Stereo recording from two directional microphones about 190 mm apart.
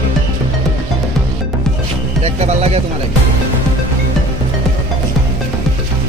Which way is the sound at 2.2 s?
35° right (ahead or behind).